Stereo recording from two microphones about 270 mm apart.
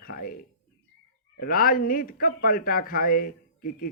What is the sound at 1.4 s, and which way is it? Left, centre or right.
Speech, left.